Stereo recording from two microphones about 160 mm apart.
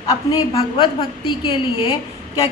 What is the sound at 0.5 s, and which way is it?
A woman's voice, 30° left (ahead or behind).